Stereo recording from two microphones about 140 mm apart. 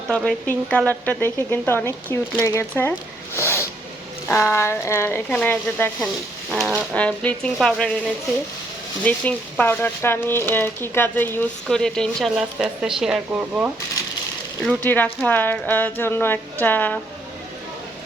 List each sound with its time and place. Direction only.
0.1 s speech: 10° left (ahead or behind)
3.3 s zipper: 20° left (ahead or behind)
4.3 s speech: 15° left (ahead or behind)
6.5 s speech: centre (ahead or behind)
9.0 s speech: 10° left (ahead or behind); by 13.7 s 10° right (ahead or behind)
14.8 s speech: 15° left (ahead or behind)